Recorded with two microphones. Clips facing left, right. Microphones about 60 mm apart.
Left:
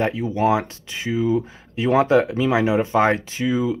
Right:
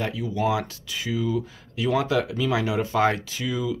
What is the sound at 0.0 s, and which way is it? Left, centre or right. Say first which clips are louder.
Speech: left 6 dB; left.